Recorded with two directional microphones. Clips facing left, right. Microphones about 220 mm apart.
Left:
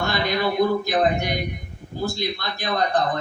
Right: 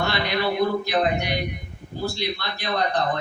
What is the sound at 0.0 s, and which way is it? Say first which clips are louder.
Speech: left 1 dB; 45° left (ahead or behind).